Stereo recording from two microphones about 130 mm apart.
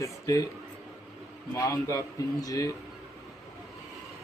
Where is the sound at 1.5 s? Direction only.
25° left (ahead or behind).